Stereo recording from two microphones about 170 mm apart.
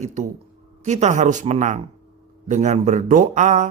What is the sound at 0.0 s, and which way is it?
Speech, 40° right (ahead or behind).